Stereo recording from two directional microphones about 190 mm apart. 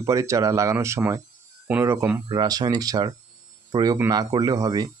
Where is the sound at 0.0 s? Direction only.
15° right (ahead or behind).